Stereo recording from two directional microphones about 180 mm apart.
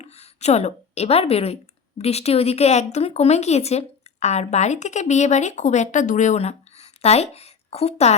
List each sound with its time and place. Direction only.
0.0 s a woman's voice: 35° left (ahead or behind)